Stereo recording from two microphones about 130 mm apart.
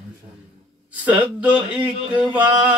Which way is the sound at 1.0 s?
10° right (ahead or behind).